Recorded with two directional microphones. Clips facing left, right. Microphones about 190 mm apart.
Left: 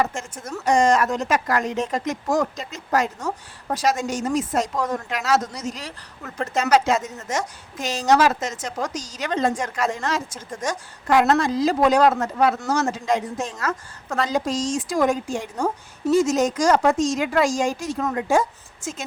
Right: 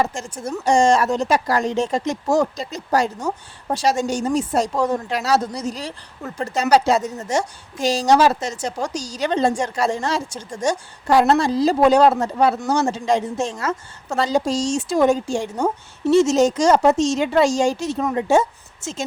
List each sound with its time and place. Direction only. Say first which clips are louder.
0.0 s speech: right 2 dB; 30° right (ahead or behind)
0.3 s speech: right 5 dB; 10° right (ahead or behind)
0.6 s a woman's voice: right 2 dB; 30° right (ahead or behind)